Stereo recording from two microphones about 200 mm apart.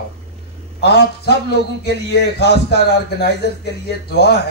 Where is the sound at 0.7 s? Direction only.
55° left (ahead or behind).